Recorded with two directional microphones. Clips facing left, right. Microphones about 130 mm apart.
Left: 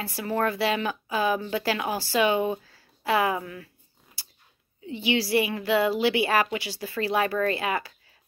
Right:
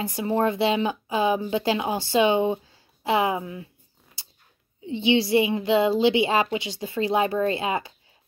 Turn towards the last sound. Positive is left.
turn(degrees=-25)  # may be behind; listen again after turning